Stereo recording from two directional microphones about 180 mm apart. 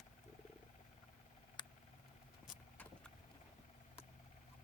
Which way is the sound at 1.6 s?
25° left (ahead or behind).